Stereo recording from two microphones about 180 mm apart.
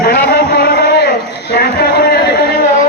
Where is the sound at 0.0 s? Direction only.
60° left (ahead or behind).